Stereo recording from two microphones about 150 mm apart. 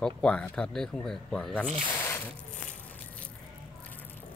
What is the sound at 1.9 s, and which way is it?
Zipper, 15° left (ahead or behind).